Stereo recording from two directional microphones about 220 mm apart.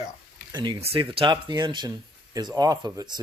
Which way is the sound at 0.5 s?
20° right (ahead or behind).